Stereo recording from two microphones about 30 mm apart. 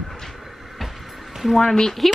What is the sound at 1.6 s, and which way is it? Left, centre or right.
Speech, centre.